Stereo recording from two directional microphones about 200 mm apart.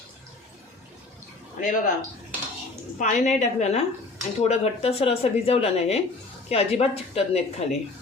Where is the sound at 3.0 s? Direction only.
35° left (ahead or behind).